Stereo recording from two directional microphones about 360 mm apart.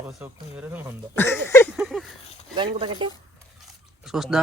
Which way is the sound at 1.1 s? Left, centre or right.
Centre.